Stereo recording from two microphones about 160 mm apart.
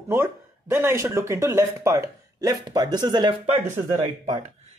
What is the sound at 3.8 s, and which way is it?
Speech, 50° right (ahead or behind).